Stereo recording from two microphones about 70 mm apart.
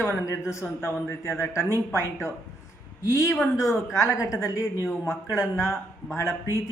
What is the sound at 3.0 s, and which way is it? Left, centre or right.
Speech, left.